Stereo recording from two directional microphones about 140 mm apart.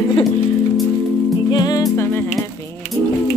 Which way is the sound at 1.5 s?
30° left (ahead or behind).